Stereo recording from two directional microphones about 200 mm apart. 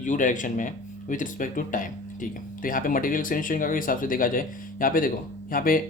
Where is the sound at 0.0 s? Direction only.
40° left (ahead or behind).